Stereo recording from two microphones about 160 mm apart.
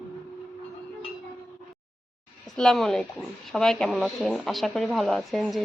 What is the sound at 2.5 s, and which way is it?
Speech, 5° left (ahead or behind).